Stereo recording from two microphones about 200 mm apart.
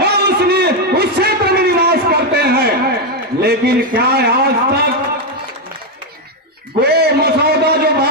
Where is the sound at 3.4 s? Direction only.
50° right (ahead or behind).